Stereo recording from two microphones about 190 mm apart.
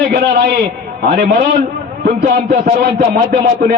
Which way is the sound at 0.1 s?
50° right (ahead or behind).